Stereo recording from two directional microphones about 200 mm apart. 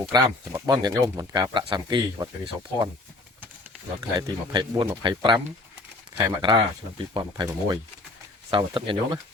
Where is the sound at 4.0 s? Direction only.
20° right (ahead or behind).